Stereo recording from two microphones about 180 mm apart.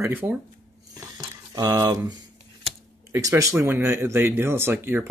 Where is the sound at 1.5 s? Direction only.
20° right (ahead or behind).